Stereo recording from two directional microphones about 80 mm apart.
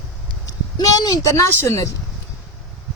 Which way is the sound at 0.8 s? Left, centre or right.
Left.